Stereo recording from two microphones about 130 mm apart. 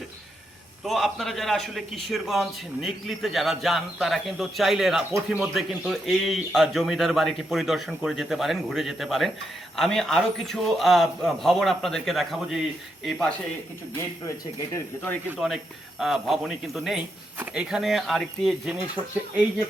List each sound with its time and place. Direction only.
0.9 s a man's voice: centre (ahead or behind)
14.7 s speech: 15° left (ahead or behind)
15.4 s a man's voice: centre (ahead or behind)